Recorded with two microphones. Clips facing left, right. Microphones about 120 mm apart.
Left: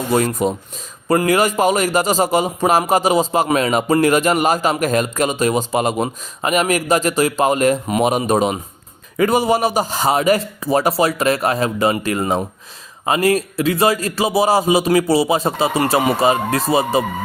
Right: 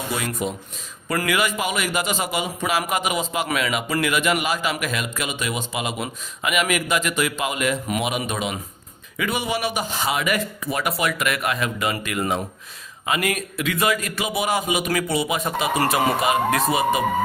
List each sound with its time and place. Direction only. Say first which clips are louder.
0.1 s a man's voice: left 11 dB; 40° left (ahead or behind)